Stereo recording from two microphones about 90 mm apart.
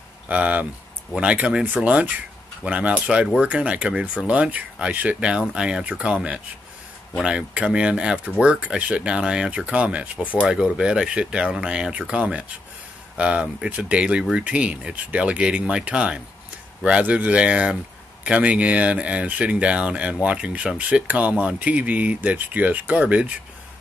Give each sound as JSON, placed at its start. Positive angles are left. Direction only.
{"t": 0.3, "sound": "speech", "side_deg": -15}